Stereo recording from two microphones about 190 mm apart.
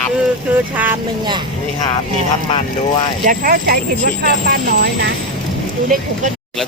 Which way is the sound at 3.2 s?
50° right (ahead or behind).